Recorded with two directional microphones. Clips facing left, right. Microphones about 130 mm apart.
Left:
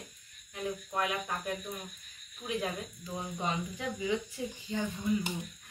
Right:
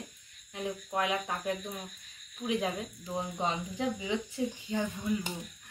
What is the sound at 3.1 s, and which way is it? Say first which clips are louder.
Speech: right 3 dB; 25° right (ahead or behind).